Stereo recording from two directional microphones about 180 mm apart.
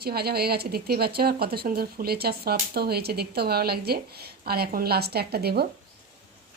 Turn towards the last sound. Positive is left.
turn(degrees=-60)  # may be behind; listen again after turning